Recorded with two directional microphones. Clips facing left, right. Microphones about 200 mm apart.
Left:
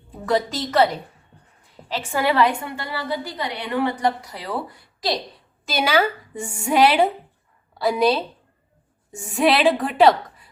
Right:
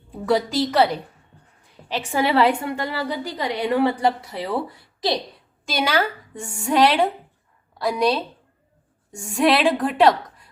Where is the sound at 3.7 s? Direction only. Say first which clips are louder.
Right 2 dB; 35° right (ahead or behind).